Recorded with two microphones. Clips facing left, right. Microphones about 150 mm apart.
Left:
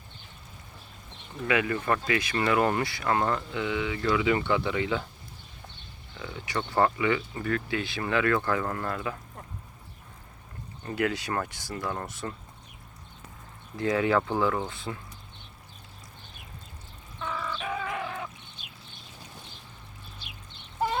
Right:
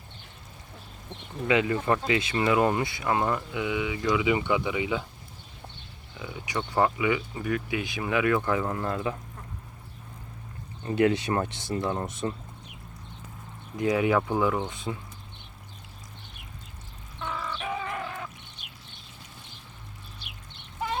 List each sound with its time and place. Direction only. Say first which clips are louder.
1.5 s speech: right 2 dB; 20° right (ahead or behind)
6.2 s speech: even; 15° right (ahead or behind)
10.8 s speech: right 6 dB; 25° right (ahead or behind)
13.7 s speech: right 1 dB; 15° right (ahead or behind)
17.6 s bird: even; 5° right (ahead or behind)